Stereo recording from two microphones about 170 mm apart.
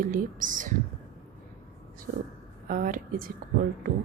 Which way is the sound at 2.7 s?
50° right (ahead or behind).